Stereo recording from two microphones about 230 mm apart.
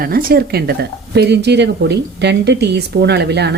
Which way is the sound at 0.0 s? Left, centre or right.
Right.